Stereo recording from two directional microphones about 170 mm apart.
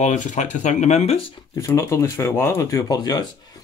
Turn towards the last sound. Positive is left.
turn(degrees=25)  # may be behind; listen again after turning